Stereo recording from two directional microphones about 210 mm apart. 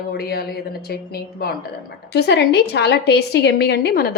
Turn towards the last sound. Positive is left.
turn(degrees=50)  # may be behind; listen again after turning